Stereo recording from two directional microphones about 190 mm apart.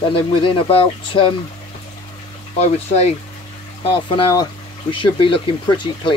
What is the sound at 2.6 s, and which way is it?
Speech, 35° left (ahead or behind).